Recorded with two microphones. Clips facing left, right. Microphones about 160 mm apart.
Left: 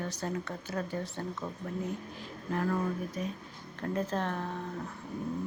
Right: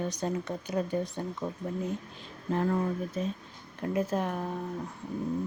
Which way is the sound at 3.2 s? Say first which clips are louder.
Right 4 dB; 25° right (ahead or behind).